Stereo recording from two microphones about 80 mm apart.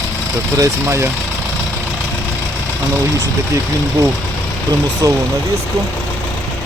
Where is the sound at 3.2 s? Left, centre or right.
Right.